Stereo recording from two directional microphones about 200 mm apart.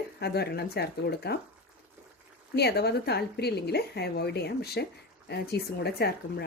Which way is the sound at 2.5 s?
55° left (ahead or behind).